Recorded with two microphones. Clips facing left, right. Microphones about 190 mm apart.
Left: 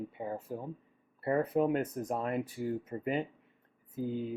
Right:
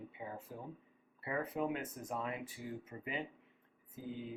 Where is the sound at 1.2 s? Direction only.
45° left (ahead or behind).